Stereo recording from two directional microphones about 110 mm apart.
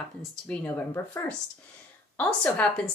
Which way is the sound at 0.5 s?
20° left (ahead or behind).